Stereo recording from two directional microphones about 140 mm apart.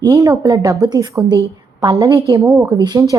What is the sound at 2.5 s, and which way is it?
Speech, 5° right (ahead or behind).